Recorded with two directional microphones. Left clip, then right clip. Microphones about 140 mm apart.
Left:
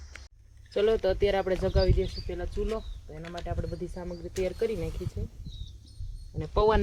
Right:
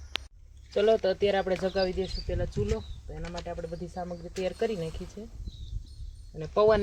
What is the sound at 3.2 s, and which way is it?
Speech, 15° left (ahead or behind).